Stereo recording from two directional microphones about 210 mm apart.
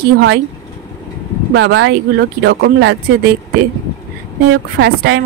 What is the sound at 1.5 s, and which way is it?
Speech, 55° right (ahead or behind).